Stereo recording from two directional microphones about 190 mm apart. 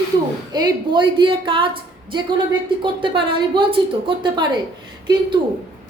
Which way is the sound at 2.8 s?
25° right (ahead or behind).